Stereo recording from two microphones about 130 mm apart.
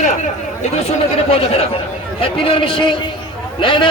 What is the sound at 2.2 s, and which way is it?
Speech, 45° left (ahead or behind).